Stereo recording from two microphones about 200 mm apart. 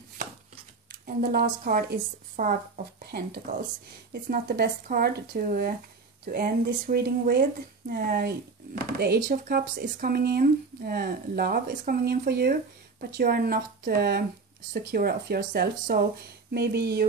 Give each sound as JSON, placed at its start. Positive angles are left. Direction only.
{"t": 1.0, "sound": "speech", "side_deg": -50}